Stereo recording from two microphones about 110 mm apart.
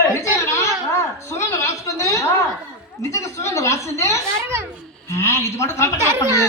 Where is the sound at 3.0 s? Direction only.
25° left (ahead or behind).